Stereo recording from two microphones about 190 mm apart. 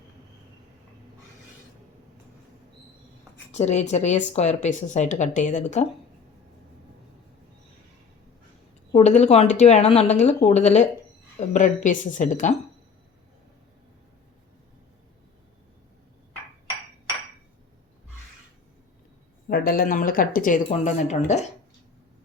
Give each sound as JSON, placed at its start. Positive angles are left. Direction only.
{"t": 3.5, "sound": "speech", "side_deg": 35}
{"t": 8.9, "sound": "speech", "side_deg": 35}
{"t": 19.5, "sound": "speech", "side_deg": 50}